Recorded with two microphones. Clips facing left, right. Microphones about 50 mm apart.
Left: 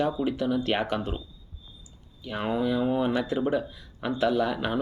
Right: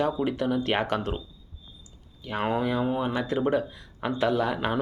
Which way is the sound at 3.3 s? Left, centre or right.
Right.